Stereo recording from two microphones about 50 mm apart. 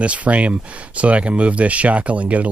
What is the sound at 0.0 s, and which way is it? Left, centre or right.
Speech, right.